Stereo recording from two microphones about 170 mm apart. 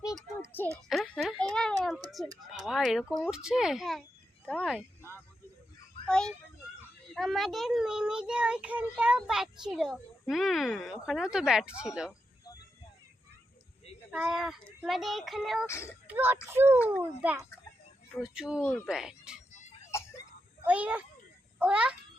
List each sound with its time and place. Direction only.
0.9 s a sound: centre (ahead or behind)
2.0 s a child's voice: centre (ahead or behind)
6.1 s a child's voice: 5° left (ahead or behind)
14.1 s a child's voice: 5° right (ahead or behind)
15.6 s speech: 15° left (ahead or behind)
16.0 s a child's voice: 10° right (ahead or behind)
18.6 s speech: 15° left (ahead or behind)
18.9 s a child's voice: 5° right (ahead or behind)
19.9 s a sound: 15° left (ahead or behind)
20.7 s speech: 10° right (ahead or behind)